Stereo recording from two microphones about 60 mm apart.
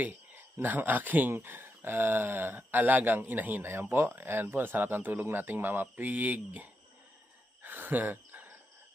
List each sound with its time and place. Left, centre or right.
0.0 s cricket: right
0.6 s speech: right
7.6 s cricket: right